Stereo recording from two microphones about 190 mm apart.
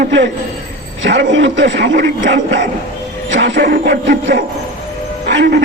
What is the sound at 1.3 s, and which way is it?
A man's voice, 70° right (ahead or behind).